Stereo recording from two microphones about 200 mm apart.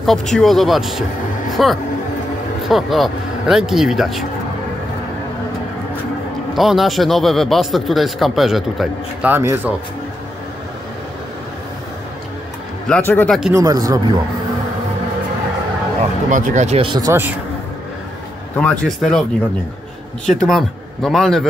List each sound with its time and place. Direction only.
0.0 s a man's voice: centre (ahead or behind)
6.5 s a man's voice: centre (ahead or behind)
12.8 s a man's voice: 5° left (ahead or behind)
13.5 s speech: 15° right (ahead or behind)
16.3 s speech: 35° right (ahead or behind); by 17.4 s 10° right (ahead or behind)
18.6 s a man's voice: 5° left (ahead or behind)
20.4 s a man's voice: centre (ahead or behind)